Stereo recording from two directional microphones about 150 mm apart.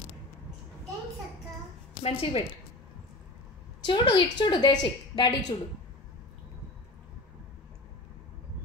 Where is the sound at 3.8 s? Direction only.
30° left (ahead or behind).